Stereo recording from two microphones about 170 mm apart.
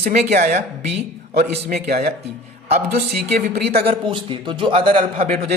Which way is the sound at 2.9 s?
65° right (ahead or behind).